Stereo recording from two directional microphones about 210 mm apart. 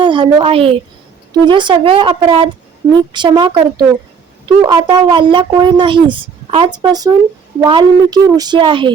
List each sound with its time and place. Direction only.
0.0 s a woman's voice: 20° right (ahead or behind)